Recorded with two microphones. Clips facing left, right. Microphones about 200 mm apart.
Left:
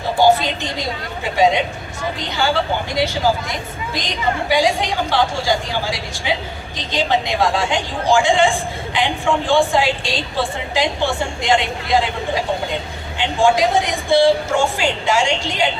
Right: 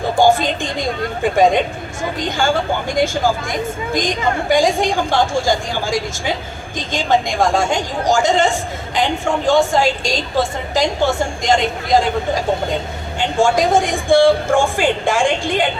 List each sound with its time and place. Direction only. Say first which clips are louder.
0.2 s speech: right 1 dB; 50° right (ahead or behind)